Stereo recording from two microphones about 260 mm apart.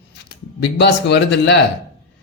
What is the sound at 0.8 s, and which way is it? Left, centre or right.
Speech, left.